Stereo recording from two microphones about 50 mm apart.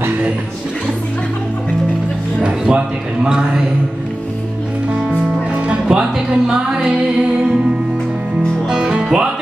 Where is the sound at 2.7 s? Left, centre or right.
Centre.